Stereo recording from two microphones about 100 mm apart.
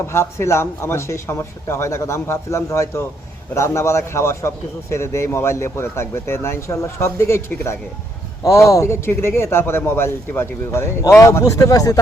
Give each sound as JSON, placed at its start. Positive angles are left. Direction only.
{"t": 0.0, "sound": "a man's voice", "side_deg": 25}